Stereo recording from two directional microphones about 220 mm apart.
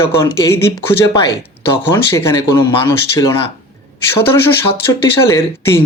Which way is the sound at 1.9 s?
10° left (ahead or behind).